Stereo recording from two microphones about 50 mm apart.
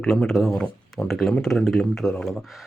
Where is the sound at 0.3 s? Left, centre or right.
Centre.